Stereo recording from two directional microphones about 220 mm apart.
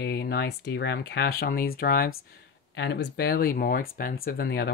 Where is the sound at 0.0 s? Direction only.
50° left (ahead or behind).